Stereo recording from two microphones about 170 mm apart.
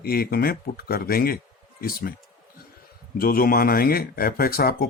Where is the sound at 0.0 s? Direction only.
60° left (ahead or behind).